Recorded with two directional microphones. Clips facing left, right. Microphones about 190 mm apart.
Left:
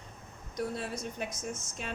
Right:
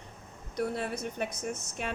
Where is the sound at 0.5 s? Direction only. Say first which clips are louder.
Right 3 dB; 60° right (ahead or behind).